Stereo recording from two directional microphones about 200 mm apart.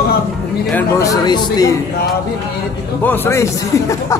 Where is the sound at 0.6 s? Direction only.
10° left (ahead or behind).